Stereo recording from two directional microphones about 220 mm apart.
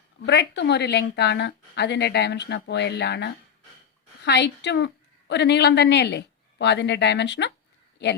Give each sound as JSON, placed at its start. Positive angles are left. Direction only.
{"t": 0.3, "sound": "speech", "side_deg": 50}